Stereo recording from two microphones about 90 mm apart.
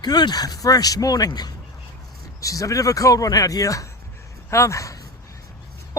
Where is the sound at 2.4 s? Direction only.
40° left (ahead or behind).